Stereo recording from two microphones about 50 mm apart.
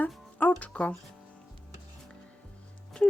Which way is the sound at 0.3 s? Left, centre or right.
Left.